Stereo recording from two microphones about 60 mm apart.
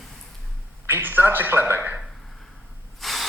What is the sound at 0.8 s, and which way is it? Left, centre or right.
A man's voice, right.